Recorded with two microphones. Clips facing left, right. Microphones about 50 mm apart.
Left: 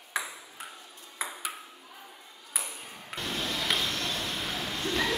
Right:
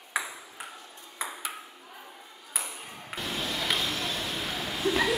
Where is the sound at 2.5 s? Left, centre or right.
Centre.